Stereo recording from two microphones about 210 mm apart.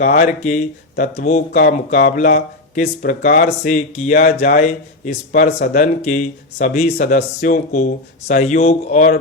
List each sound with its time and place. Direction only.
0.0 s speech: 35° left (ahead or behind)